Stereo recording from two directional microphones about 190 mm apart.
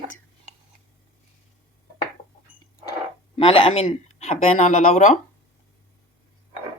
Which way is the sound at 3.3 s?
30° left (ahead or behind).